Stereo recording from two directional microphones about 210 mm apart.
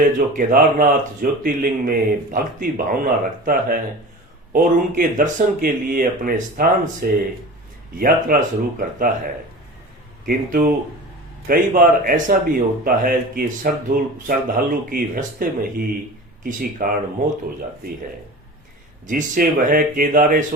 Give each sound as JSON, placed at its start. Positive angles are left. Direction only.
{"t": 0.3, "sound": "speech", "side_deg": -40}
{"t": 10.2, "sound": "speech", "side_deg": -40}
{"t": 19.0, "sound": "speech", "side_deg": -40}